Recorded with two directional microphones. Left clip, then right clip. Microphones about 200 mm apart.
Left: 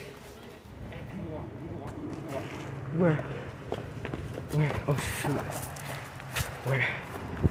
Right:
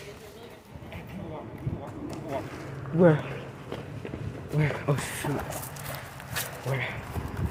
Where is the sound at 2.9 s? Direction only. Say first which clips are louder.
Right 7 dB; 35° right (ahead or behind).